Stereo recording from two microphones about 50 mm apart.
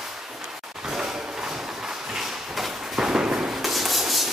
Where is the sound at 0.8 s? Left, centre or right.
Centre.